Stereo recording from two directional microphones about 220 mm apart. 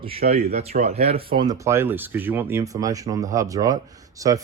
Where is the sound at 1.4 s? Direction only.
15° right (ahead or behind).